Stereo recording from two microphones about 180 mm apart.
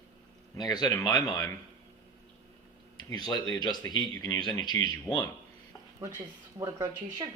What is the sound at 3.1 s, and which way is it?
Speech, 20° left (ahead or behind).